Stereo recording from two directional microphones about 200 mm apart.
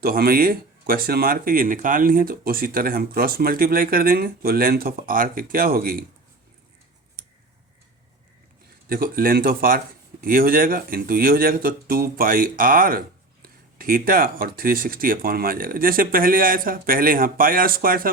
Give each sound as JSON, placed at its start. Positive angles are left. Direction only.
{"t": 0.0, "sound": "speech", "side_deg": -50}
{"t": 8.9, "sound": "speech", "side_deg": -45}